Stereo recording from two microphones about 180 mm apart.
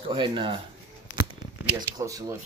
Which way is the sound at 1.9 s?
20° right (ahead or behind).